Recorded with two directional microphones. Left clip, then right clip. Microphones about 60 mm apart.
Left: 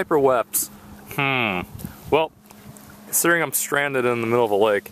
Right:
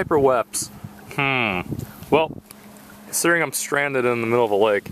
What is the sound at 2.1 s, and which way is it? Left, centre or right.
Speech, centre.